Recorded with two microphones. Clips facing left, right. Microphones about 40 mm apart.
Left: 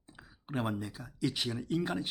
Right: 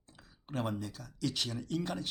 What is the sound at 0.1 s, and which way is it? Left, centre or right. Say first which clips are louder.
Speech: left 3 dB; centre.